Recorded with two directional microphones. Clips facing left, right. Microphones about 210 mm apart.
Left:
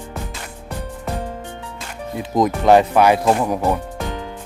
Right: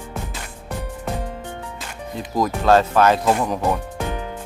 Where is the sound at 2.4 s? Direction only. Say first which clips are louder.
Left 3 dB; 20° left (ahead or behind).